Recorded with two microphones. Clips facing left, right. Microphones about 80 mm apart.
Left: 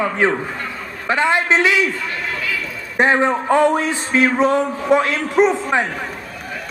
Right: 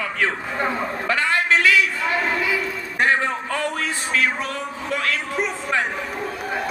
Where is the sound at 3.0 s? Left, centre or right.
Left.